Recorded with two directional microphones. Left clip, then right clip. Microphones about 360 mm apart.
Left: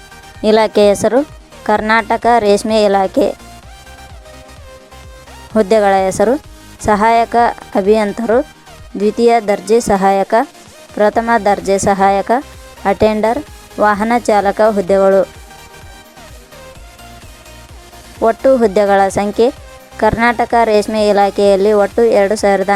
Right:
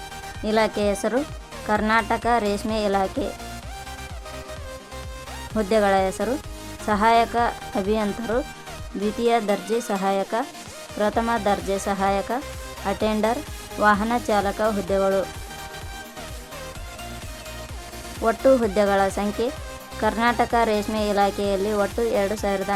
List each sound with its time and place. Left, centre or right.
0.4 s speech: left
5.5 s speech: centre
18.2 s speech: centre